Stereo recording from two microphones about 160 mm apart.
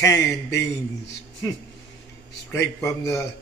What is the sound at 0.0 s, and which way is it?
Speech, 20° left (ahead or behind).